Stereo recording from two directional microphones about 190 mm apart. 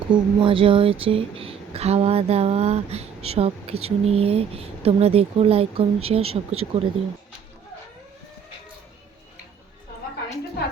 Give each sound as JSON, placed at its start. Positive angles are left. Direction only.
{"t": 0.1, "sound": "speech", "side_deg": -25}